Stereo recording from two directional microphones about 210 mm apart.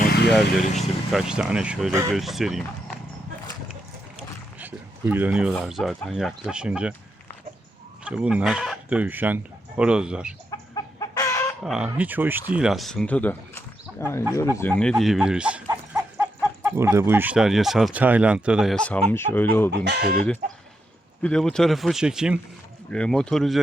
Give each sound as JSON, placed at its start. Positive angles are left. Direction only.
{"t": 0.0, "sound": "vehicle", "side_deg": 50}
{"t": 0.3, "sound": "speech", "side_deg": 0}
{"t": 2.1, "sound": "speech", "side_deg": 0}
{"t": 4.6, "sound": "speech", "side_deg": -10}
{"t": 8.0, "sound": "speech", "side_deg": -5}
{"t": 10.8, "sound": "chicken", "side_deg": 15}
{"t": 11.6, "sound": "speech", "side_deg": -5}
{"t": 15.9, "sound": "a sound", "side_deg": -10}
{"t": 16.6, "sound": "speech", "side_deg": -10}
{"t": 19.7, "sound": "speech", "side_deg": -55}
{"t": 21.2, "sound": "speech", "side_deg": 5}